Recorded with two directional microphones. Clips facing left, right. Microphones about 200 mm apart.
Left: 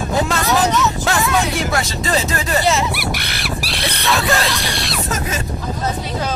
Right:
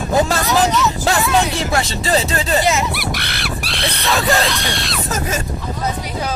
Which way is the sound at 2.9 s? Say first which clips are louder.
Even; centre (ahead or behind).